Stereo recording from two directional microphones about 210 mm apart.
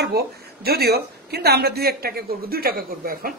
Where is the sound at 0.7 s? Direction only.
50° right (ahead or behind).